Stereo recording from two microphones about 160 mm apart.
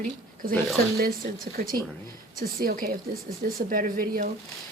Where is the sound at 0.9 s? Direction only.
70° right (ahead or behind).